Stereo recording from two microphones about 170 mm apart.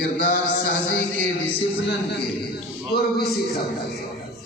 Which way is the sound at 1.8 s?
75° left (ahead or behind).